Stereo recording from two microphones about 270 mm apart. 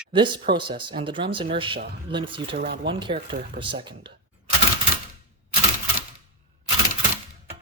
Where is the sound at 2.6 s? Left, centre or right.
Right.